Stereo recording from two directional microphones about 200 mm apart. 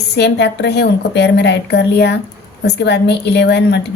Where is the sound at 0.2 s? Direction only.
60° left (ahead or behind).